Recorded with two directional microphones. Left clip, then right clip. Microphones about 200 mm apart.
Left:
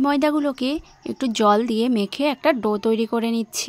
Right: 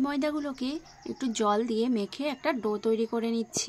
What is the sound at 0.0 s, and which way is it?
Speech, 45° left (ahead or behind).